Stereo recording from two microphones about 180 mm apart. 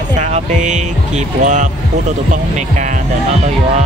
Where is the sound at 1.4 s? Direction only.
40° right (ahead or behind).